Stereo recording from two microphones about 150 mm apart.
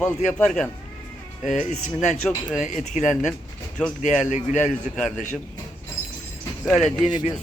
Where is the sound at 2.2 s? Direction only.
Centre (ahead or behind).